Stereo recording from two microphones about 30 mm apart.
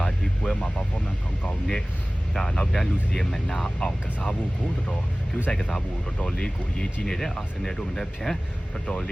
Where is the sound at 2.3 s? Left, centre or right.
Centre.